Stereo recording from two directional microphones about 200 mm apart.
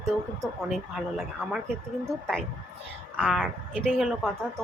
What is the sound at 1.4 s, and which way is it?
Speech, centre (ahead or behind).